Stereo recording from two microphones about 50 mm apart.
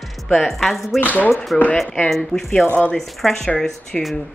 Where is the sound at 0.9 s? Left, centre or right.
Left.